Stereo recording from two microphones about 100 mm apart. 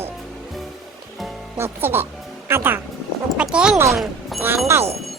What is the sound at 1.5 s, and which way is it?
Speech, 25° right (ahead or behind).